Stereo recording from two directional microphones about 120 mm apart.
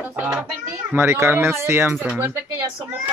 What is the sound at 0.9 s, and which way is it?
Speech, 20° right (ahead or behind).